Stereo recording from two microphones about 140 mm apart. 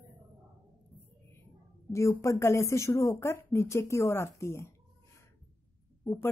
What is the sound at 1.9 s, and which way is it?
Speech, 20° left (ahead or behind).